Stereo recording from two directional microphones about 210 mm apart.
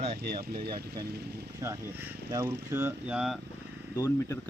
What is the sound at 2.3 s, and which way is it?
Speech, 15° right (ahead or behind).